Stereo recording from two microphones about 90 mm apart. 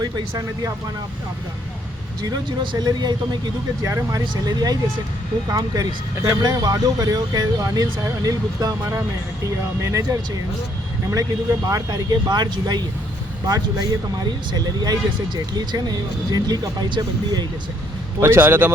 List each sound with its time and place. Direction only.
0.0 s speech: 45° right (ahead or behind)
2.2 s speech: 50° right (ahead or behind)
3.8 s speech: 35° right (ahead or behind)
14.3 s speech: 50° right (ahead or behind)
18.2 s a man's voice: 25° right (ahead or behind)